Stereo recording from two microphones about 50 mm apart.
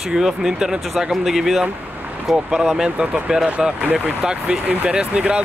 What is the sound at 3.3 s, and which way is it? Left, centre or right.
Speech, centre.